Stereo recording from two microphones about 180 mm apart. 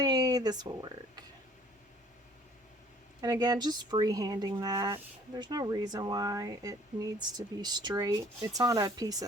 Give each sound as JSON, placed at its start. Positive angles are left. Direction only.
{"t": 0.0, "sound": "speech", "side_deg": -20}
{"t": 3.2, "sound": "speech", "side_deg": -20}